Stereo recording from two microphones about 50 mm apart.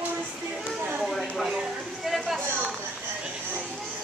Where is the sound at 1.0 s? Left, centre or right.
Centre.